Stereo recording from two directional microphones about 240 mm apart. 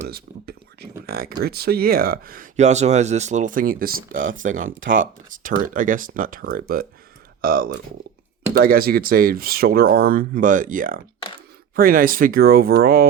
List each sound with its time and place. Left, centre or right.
0.1 s a sound: right
1.4 s speech: right
4.4 s speech: right
5.3 s speech: right